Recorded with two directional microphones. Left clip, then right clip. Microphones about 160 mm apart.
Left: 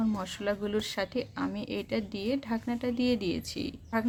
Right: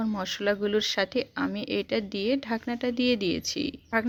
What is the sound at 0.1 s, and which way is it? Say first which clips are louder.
Speech: right 5 dB; 35° right (ahead or behind).